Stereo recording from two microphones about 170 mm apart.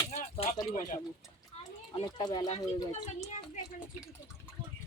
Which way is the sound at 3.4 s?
20° left (ahead or behind).